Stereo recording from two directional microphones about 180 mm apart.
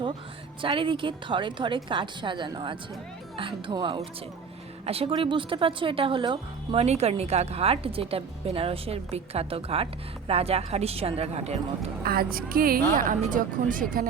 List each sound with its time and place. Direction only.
0.6 s a woman's voice: 30° right (ahead or behind)
12.0 s a woman's voice: 55° right (ahead or behind)